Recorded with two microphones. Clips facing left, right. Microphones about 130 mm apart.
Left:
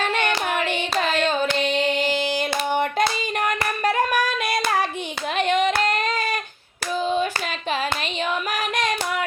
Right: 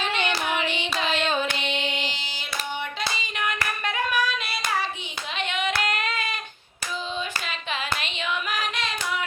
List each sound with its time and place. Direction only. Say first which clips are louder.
0.0 s hands: left 4 dB; 50° left (ahead or behind)
3.6 s singing: left 6 dB; 40° left (ahead or behind)
4.6 s hands: left 3 dB; 50° left (ahead or behind)
5.4 s child singing: left 7 dB; 40° left (ahead or behind)
8.5 s a sound: left 5 dB; 50° left (ahead or behind)